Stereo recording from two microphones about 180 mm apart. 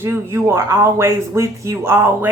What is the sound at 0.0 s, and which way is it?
Speech, 15° right (ahead or behind).